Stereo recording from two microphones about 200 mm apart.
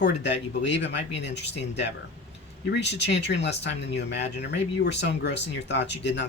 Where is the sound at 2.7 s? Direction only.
60° left (ahead or behind).